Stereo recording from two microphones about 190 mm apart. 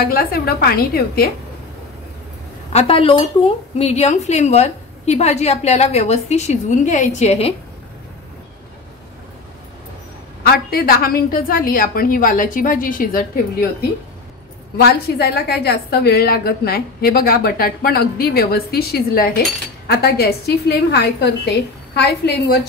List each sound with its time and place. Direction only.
0.0 s a woman's voice: 50° left (ahead or behind)
2.7 s a woman's voice: 30° left (ahead or behind)
10.4 s a woman's voice: 50° left (ahead or behind)
14.8 s a woman's voice: 60° left (ahead or behind)